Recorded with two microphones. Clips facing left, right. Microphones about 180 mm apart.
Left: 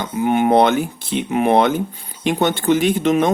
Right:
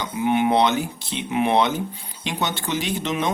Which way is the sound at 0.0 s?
45° left (ahead or behind).